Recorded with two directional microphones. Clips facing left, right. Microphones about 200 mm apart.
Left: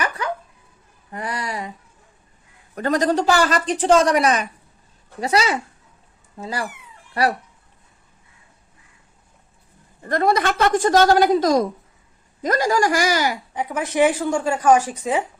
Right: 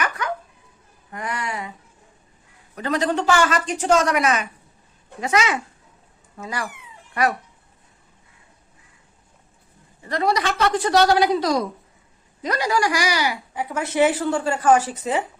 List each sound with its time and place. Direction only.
0.2 s a sound: 30° left (ahead or behind)
1.1 s speech: 35° left (ahead or behind)
2.7 s a woman's voice: 45° left (ahead or behind)
10.0 s a woman's voice: 50° left (ahead or behind)
13.5 s a woman's voice: 15° left (ahead or behind)